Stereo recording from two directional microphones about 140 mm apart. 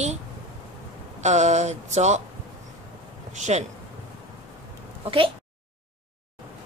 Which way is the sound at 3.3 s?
55° right (ahead or behind).